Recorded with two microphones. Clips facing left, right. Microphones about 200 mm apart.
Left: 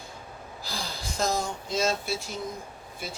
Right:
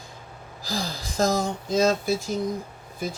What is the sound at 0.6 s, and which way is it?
Speech, 90° right.